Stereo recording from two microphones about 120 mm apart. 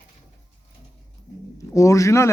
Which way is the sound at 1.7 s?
25° left (ahead or behind).